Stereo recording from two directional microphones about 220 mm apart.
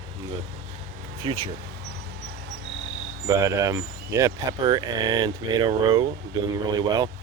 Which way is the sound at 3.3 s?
15° right (ahead or behind).